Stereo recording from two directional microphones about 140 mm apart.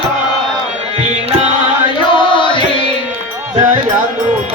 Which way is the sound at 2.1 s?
35° left (ahead or behind).